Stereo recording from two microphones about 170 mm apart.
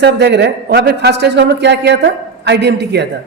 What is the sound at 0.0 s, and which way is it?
A man's voice, 90° right.